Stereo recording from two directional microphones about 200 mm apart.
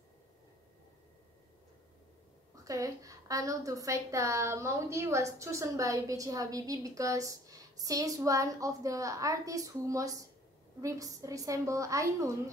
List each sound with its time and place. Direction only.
2.5 s a woman's voice: 15° right (ahead or behind)